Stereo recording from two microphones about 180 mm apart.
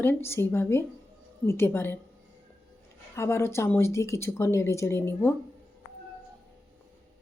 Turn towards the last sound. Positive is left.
turn(degrees=10)  # may be behind; listen again after turning